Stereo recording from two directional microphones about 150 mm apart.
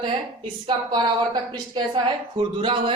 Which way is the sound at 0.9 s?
30° right (ahead or behind).